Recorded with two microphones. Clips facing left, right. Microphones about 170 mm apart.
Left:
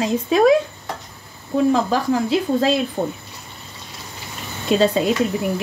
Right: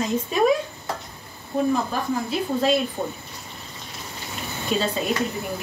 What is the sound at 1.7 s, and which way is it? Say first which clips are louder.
Speech: left 6 dB; 90° left.